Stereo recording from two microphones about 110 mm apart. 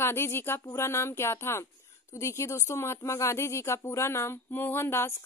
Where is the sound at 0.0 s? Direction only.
20° left (ahead or behind).